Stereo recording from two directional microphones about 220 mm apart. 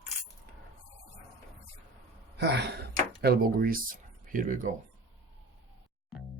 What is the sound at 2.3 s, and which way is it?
Speech, 50° right (ahead or behind).